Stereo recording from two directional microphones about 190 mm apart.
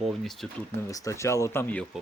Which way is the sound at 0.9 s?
15° left (ahead or behind).